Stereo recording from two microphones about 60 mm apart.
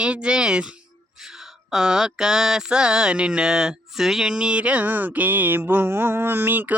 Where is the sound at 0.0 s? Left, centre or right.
Centre.